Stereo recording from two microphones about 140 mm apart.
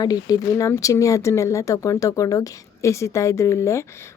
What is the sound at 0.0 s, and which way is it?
Speech, 25° left (ahead or behind).